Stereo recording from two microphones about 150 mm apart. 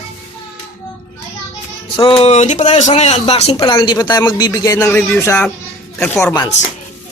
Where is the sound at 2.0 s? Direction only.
35° left (ahead or behind).